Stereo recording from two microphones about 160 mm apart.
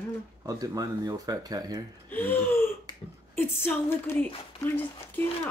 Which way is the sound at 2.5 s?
15° left (ahead or behind).